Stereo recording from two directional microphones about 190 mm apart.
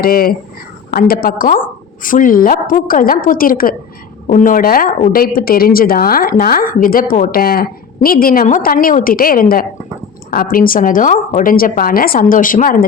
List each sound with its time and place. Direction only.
0.0 s a woman's voice: 50° left (ahead or behind)